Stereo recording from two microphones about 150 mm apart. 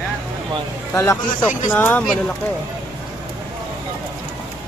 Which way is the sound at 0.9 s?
20° left (ahead or behind).